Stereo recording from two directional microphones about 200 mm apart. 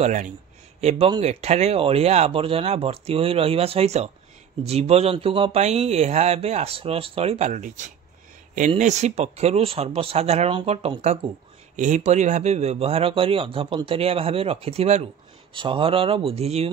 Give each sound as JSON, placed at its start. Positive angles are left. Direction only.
{"t": 0.0, "sound": "speech", "side_deg": -40}